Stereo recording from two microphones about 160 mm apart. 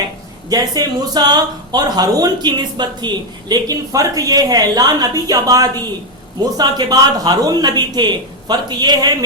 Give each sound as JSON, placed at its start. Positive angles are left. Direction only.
{"t": 0.5, "sound": "speech", "side_deg": -25}